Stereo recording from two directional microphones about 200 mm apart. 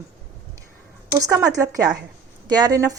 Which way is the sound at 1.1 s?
15° right (ahead or behind).